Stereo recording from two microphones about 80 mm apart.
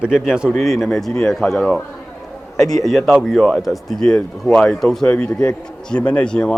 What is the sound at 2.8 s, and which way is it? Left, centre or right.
Speech, centre.